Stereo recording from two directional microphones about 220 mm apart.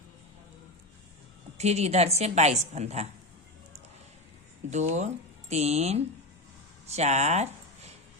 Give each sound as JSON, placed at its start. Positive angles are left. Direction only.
{"t": 1.5, "sound": "a woman's voice", "side_deg": -30}
{"t": 4.7, "sound": "speech", "side_deg": -30}